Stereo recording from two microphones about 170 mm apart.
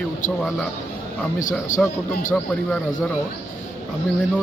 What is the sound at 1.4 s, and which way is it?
Speech, 50° left (ahead or behind).